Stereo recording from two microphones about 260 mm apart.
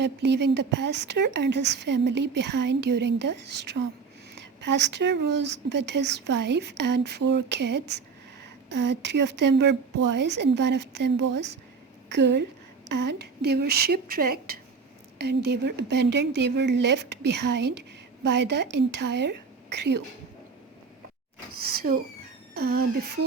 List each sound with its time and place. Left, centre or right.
0.0 s a woman's voice: right
21.8 s a woman's voice: right